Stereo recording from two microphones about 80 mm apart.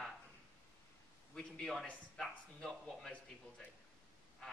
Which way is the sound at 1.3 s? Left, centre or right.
Centre.